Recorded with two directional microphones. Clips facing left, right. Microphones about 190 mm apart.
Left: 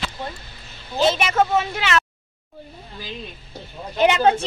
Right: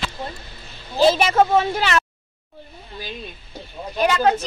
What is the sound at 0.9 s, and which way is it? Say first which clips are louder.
A woman's voice: right 3 dB; 35° right (ahead or behind).